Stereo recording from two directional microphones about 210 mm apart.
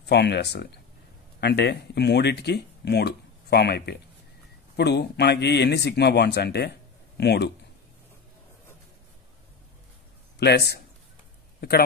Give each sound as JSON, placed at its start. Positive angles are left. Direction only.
{"t": 0.0, "sound": "speech", "side_deg": 55}
{"t": 10.4, "sound": "speech", "side_deg": 50}